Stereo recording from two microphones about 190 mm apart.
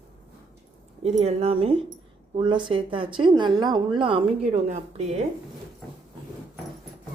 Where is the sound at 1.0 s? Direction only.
35° right (ahead or behind).